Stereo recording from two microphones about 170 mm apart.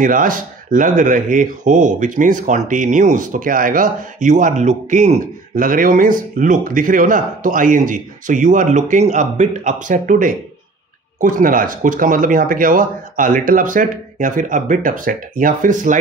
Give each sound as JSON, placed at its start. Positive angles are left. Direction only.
{"t": 0.0, "sound": "speech", "side_deg": -55}